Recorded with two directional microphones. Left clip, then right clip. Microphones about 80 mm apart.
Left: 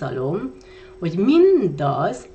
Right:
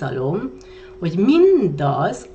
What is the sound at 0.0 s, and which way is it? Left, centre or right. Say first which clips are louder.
Speech: right 2 dB; left.